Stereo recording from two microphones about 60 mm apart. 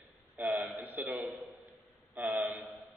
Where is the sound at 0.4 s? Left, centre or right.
Right.